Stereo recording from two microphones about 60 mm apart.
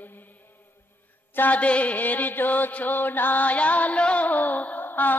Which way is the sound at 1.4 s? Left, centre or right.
Left.